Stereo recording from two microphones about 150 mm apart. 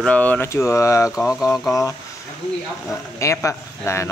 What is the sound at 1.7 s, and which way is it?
Speech, 20° left (ahead or behind).